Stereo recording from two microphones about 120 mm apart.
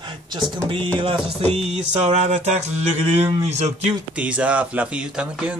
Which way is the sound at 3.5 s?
70° right (ahead or behind).